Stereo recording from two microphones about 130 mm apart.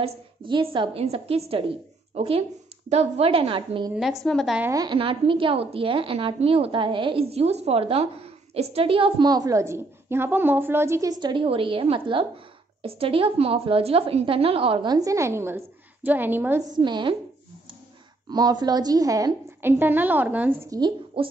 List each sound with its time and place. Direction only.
0.5 s a woman's voice: 40° right (ahead or behind)
3.9 s a woman's voice: centre (ahead or behind)
4.6 s a woman's voice: 30° right (ahead or behind)
4.9 s a woman's voice: 45° right (ahead or behind)
15.0 s a woman's voice: 25° right (ahead or behind)
16.7 s a woman's voice: 35° right (ahead or behind)
18.3 s a woman's voice: 30° right (ahead or behind)
19.8 s a woman's voice: 15° right (ahead or behind)
21.2 s a woman's voice: 45° right (ahead or behind)